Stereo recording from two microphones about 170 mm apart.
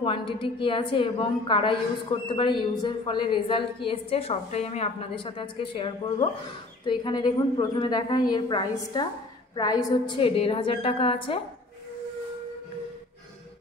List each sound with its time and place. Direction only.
0.0 s a woman's voice: 30° left (ahead or behind)